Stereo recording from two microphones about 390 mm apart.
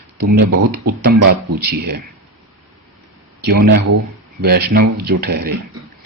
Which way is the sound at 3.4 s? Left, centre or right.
Right.